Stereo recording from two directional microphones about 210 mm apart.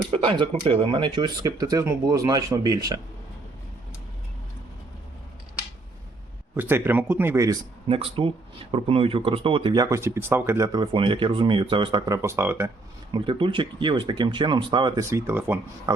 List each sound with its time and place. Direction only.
0.1 s speech: 25° right (ahead or behind)
6.6 s speech: 10° right (ahead or behind)
7.9 s speech: 25° right (ahead or behind); by 16.0 s 10° right (ahead or behind)